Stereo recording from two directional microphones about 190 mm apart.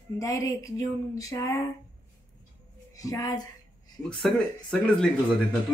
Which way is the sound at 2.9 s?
20° left (ahead or behind).